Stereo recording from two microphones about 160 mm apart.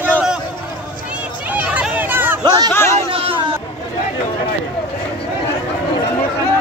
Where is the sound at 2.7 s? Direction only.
15° left (ahead or behind).